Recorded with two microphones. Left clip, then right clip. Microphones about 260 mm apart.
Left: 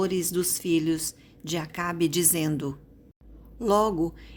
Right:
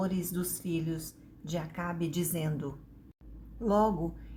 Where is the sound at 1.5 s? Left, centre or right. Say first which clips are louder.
Left 7 dB; left.